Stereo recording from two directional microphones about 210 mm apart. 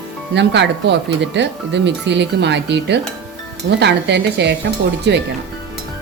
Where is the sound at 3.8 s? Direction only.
55° right (ahead or behind).